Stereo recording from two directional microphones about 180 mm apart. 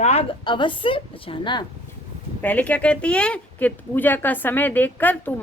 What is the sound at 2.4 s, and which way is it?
Speech, 10° left (ahead or behind).